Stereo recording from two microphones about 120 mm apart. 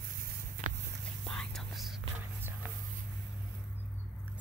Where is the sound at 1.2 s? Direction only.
5° left (ahead or behind).